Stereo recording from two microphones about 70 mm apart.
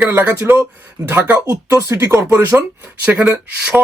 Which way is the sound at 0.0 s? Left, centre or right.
Right.